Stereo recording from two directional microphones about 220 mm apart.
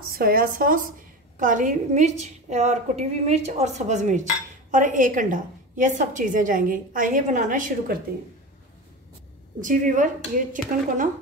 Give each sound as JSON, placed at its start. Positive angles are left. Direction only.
{"t": 0.1, "sound": "a woman's voice", "side_deg": -40}
{"t": 9.6, "sound": "a woman's voice", "side_deg": -35}